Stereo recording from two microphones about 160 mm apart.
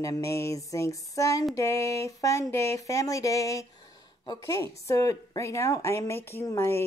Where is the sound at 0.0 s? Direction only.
20° left (ahead or behind).